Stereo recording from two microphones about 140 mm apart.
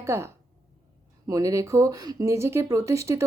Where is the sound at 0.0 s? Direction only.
20° right (ahead or behind).